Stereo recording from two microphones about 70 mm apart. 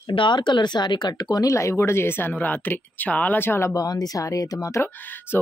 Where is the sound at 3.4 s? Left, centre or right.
Left.